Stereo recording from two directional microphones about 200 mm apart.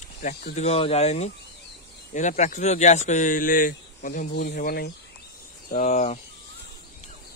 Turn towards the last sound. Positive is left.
turn(degrees=35)  # may be behind; listen again after turning